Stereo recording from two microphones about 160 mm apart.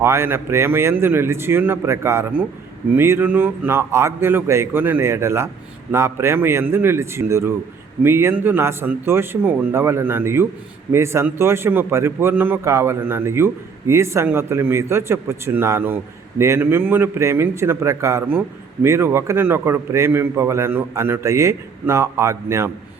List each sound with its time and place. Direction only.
0.0 s a man's voice: 15° right (ahead or behind)